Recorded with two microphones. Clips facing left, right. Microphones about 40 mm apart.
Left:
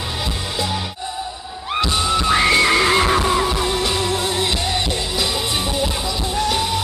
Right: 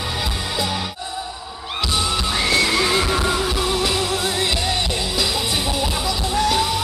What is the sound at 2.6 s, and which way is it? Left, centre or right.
Neigh, left.